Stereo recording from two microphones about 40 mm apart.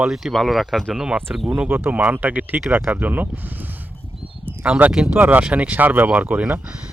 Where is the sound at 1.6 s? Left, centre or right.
Right.